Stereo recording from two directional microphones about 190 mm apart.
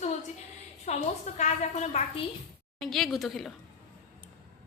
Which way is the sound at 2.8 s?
Centre (ahead or behind).